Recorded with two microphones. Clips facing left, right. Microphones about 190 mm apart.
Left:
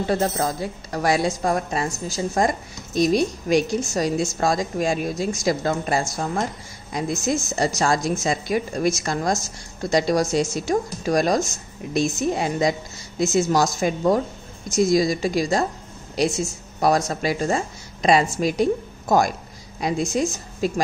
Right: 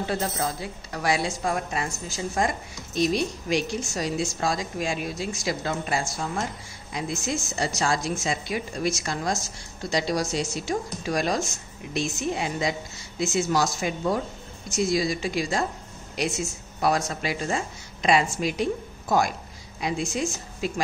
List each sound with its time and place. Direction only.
0.1 s a woman's voice: 45° left (ahead or behind)